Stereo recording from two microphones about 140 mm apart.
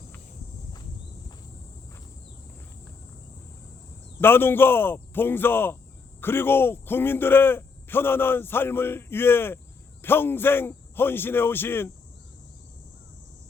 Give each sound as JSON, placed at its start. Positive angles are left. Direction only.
{"t": 4.2, "sound": "a man's voice", "side_deg": 15}